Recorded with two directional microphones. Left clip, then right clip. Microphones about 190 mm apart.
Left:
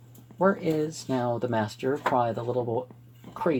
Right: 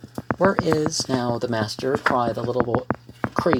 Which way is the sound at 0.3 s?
25° right (ahead or behind).